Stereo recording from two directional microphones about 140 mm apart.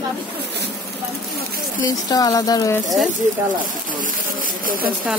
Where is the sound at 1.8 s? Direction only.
25° left (ahead or behind).